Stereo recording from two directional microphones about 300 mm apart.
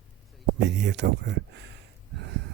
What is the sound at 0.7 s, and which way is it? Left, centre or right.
Speech, right.